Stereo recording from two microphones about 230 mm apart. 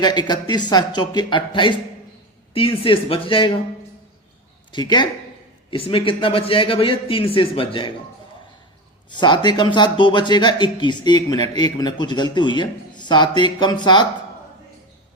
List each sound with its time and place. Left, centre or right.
0.0 s speech: centre
4.7 s speech: centre
9.0 s speech: centre